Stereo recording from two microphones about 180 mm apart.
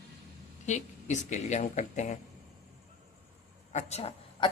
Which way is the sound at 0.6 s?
40° left (ahead or behind).